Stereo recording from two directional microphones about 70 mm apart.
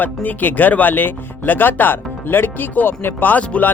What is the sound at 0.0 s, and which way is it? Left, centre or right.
Speech, left.